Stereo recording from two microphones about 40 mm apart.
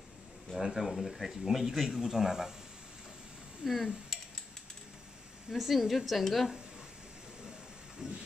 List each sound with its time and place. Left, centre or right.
0.6 s speech: centre
3.6 s a sound: centre
5.5 s a woman's voice: centre
8.0 s speech: centre